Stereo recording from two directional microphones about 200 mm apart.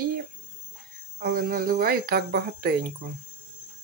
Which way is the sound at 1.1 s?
50° right (ahead or behind).